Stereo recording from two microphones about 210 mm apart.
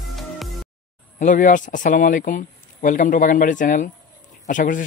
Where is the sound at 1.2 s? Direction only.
40° left (ahead or behind).